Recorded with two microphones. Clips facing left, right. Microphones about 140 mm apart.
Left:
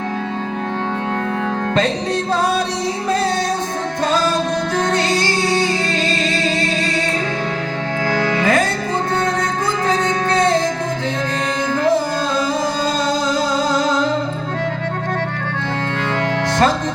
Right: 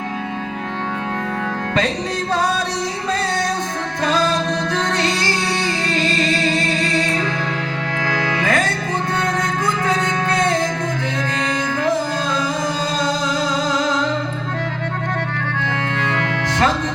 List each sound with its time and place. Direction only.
4.9 s music: 30° left (ahead or behind)
8.0 s music: 35° left (ahead or behind)